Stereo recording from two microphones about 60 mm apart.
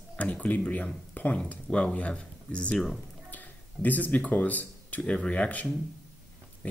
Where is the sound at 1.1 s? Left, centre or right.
Left.